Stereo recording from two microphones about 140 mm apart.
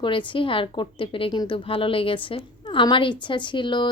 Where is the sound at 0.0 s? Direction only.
35° left (ahead or behind).